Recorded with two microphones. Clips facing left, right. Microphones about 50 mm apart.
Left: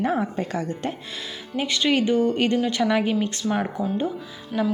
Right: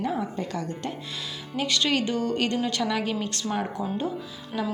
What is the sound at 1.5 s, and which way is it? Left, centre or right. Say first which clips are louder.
A woman's voice: left 3 dB; centre.